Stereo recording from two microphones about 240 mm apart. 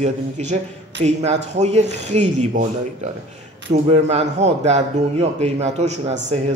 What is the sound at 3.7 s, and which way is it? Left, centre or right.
Speech, right.